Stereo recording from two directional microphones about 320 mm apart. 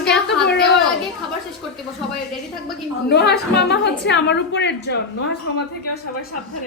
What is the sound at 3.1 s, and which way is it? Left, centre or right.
A woman's voice, left.